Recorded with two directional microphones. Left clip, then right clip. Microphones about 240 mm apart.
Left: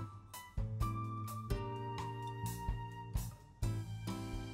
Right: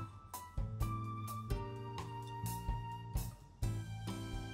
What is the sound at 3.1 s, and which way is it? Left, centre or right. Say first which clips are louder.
Music: right 1 dB; centre.